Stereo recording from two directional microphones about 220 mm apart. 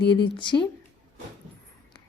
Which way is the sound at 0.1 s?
20° left (ahead or behind).